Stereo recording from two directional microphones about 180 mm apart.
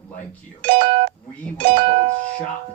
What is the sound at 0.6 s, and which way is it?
Speech, 30° right (ahead or behind).